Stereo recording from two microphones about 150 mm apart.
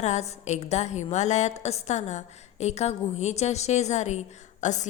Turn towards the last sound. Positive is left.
turn(degrees=55)  # may be behind; listen again after turning